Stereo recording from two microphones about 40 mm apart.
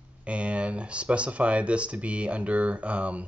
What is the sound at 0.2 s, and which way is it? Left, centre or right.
Speech, right.